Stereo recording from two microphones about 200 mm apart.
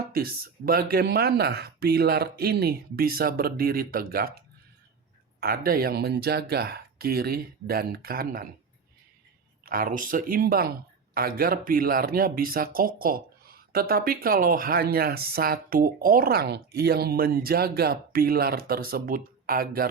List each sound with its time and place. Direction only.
0.1 s speech: 50° right (ahead or behind)
5.4 s speech: 45° right (ahead or behind)
9.6 s speech: 45° right (ahead or behind)